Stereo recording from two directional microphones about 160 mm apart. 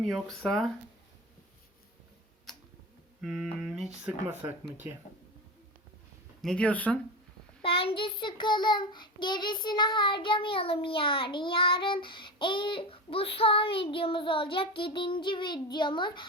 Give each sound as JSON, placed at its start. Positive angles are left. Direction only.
{"t": 0.1, "sound": "speech", "side_deg": 0}
{"t": 3.2, "sound": "speech", "side_deg": -5}
{"t": 6.4, "sound": "speech", "side_deg": 5}
{"t": 7.6, "sound": "child singing", "side_deg": 35}